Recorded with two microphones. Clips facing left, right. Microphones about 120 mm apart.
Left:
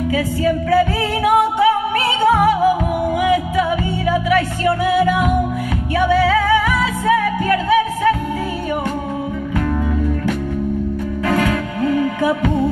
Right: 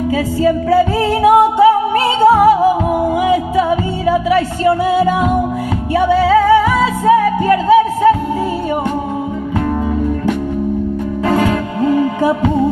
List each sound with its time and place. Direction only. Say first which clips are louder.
0.1 s music: right 4 dB; 35° right (ahead or behind)
11.2 s music: right 3 dB; 30° right (ahead or behind)